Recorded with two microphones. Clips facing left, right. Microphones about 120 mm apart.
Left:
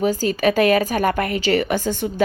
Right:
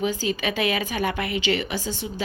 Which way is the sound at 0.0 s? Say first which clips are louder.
Left 7 dB; 40° left (ahead or behind).